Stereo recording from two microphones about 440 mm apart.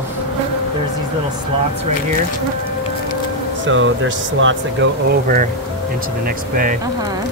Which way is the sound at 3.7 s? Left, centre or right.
Right.